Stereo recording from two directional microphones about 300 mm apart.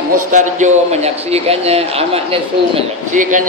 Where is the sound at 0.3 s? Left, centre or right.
Right.